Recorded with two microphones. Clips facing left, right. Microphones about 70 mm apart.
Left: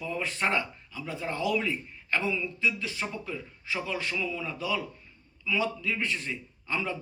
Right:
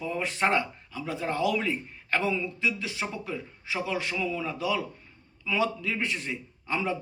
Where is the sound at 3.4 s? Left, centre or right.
Right.